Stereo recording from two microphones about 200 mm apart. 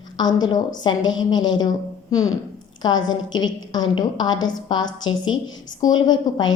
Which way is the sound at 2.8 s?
20° left (ahead or behind).